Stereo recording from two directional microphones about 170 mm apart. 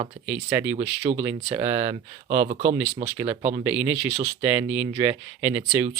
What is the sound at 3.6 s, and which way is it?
Speech, 10° right (ahead or behind).